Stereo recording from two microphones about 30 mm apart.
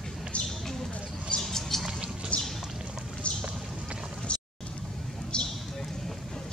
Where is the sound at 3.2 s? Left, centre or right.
Left.